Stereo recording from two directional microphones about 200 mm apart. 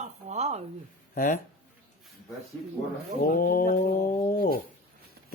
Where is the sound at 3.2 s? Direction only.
45° left (ahead or behind).